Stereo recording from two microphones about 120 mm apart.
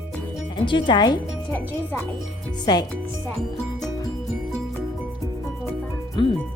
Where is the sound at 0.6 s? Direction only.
45° left (ahead or behind).